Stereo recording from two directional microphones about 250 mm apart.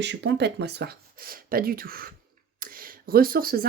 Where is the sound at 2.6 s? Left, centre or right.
Right.